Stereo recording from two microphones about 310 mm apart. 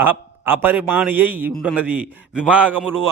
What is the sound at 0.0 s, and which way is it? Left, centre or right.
A man's voice, centre.